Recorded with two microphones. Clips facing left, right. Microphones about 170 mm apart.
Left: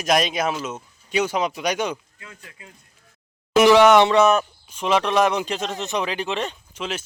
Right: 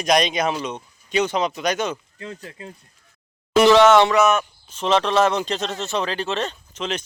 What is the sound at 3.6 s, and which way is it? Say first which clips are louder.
Speech: even; 15° left (ahead or behind).